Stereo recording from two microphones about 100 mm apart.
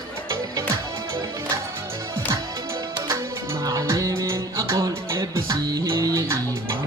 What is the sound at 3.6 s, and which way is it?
Music, 35° right (ahead or behind).